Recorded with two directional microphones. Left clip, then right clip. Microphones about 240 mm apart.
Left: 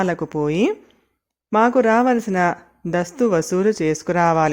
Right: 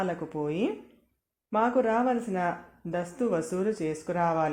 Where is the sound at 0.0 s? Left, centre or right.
Left.